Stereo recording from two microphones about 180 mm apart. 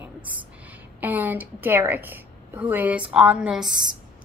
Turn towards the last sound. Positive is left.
turn(degrees=-5)  # may be behind; listen again after turning